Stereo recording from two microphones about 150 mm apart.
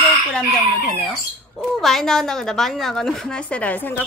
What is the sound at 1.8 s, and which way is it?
A woman's voice, centre (ahead or behind).